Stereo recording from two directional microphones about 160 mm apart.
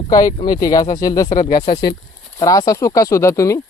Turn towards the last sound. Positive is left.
turn(degrees=20)  # may be behind; listen again after turning